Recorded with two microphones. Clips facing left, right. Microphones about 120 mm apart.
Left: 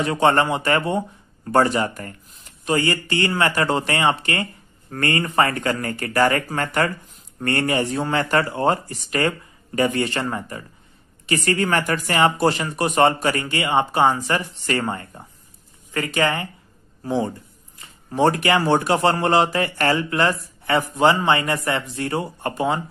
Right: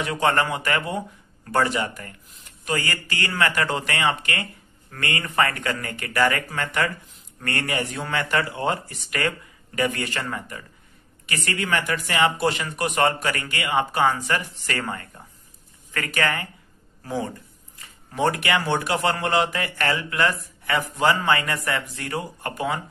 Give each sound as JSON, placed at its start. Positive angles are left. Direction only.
{"t": 0.0, "sound": "speech", "side_deg": 30}
{"t": 2.6, "sound": "speech", "side_deg": 25}
{"t": 7.3, "sound": "speech", "side_deg": 30}